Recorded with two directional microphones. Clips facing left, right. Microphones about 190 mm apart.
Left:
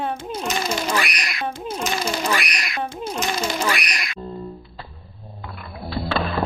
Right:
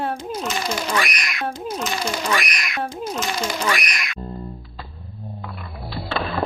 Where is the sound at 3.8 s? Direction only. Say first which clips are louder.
Even; 35° left (ahead or behind).